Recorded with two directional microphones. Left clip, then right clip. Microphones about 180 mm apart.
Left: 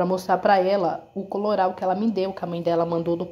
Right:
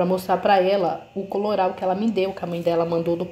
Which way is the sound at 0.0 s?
10° left (ahead or behind).